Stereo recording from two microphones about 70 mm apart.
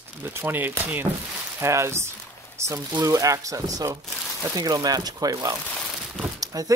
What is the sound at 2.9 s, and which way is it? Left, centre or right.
Speech, right.